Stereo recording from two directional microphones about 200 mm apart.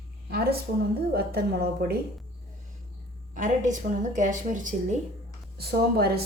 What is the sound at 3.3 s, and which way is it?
A woman's voice, 40° right (ahead or behind).